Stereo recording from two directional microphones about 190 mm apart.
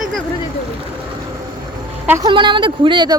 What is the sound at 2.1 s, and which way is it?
Speech, 20° right (ahead or behind).